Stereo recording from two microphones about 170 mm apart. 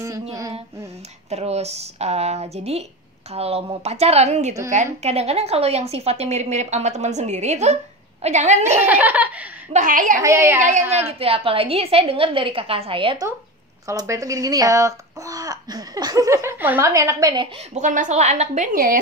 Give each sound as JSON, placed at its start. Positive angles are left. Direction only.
{"t": 0.0, "sound": "a child's voice", "side_deg": -20}
{"t": 1.3, "sound": "a woman's voice", "side_deg": -40}
{"t": 8.8, "sound": "laughter", "side_deg": -10}
{"t": 9.7, "sound": "a woman's voice", "side_deg": -50}
{"t": 10.2, "sound": "laughter", "side_deg": -15}
{"t": 11.1, "sound": "a woman's voice", "side_deg": -35}
{"t": 13.8, "sound": "a child's voice", "side_deg": -20}
{"t": 17.7, "sound": "a woman's voice", "side_deg": -45}